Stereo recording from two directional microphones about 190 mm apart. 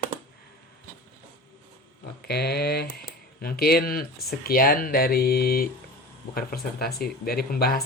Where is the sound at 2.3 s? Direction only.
55° left (ahead or behind).